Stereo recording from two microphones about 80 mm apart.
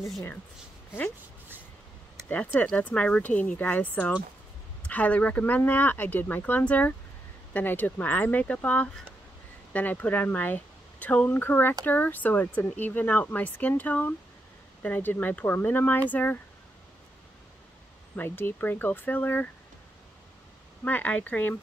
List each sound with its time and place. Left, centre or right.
2.2 s speech: centre
18.1 s speech: left
20.8 s speech: centre